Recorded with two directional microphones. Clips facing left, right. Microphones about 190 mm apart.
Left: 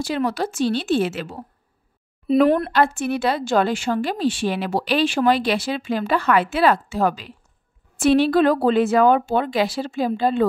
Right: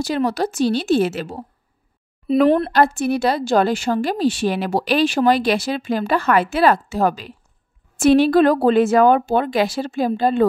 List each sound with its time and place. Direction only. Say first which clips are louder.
0.0 s a woman's voice: right 3 dB; 40° right (ahead or behind)
2.3 s speech: even; centre (ahead or behind)
2.7 s a woman's voice: right 3 dB; 40° right (ahead or behind)